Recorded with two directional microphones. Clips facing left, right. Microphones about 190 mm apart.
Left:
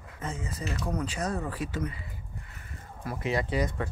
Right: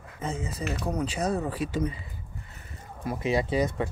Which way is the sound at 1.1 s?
10° right (ahead or behind).